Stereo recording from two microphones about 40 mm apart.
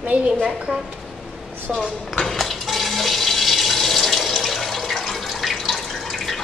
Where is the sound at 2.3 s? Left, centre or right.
Centre.